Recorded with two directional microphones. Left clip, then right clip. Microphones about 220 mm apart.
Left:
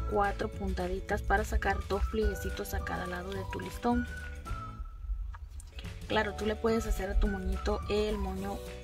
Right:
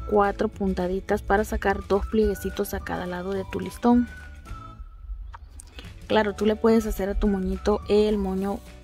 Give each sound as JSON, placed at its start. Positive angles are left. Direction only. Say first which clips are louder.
{"t": 0.1, "sound": "speech", "louder": "right 9 dB", "side_deg": -45}
{"t": 5.3, "sound": "music", "louder": "right 7 dB", "side_deg": -50}
{"t": 7.6, "sound": "speech", "louder": "right 10 dB", "side_deg": -50}